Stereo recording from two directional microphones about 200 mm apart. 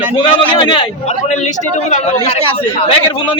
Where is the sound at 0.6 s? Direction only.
25° left (ahead or behind).